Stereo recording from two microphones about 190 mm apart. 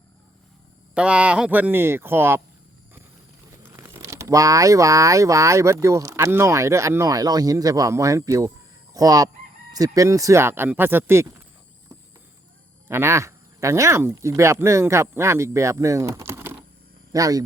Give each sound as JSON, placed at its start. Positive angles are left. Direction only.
{"t": 0.9, "sound": "speech", "side_deg": -5}
{"t": 3.6, "sound": "speech", "side_deg": -15}
{"t": 12.9, "sound": "speech", "side_deg": -15}